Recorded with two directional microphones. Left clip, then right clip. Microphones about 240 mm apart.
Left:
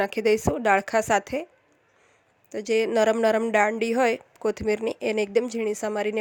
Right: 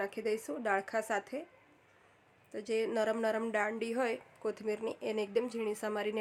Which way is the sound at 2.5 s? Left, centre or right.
Left.